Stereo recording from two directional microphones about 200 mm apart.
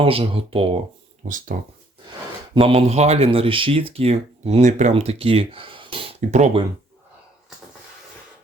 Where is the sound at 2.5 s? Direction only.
30° right (ahead or behind).